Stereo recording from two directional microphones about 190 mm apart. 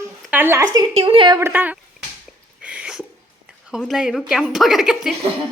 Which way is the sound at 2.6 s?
5° right (ahead or behind).